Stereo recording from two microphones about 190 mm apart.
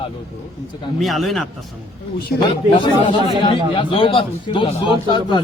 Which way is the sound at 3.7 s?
25° left (ahead or behind).